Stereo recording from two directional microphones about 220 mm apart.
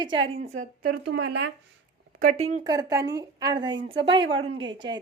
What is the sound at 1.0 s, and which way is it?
Speech, 50° right (ahead or behind).